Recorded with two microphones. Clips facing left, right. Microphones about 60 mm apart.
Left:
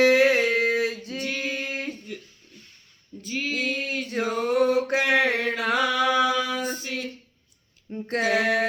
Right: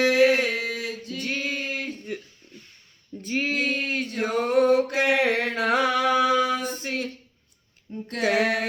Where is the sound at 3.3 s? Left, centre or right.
Right.